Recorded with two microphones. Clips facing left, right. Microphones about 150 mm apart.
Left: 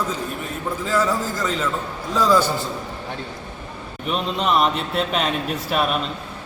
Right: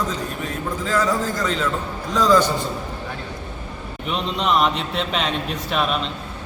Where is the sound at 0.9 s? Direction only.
5° left (ahead or behind).